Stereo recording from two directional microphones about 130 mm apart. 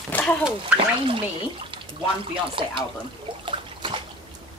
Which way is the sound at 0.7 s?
45° right (ahead or behind).